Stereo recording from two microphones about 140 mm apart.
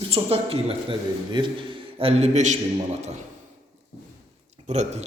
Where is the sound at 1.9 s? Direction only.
45° right (ahead or behind).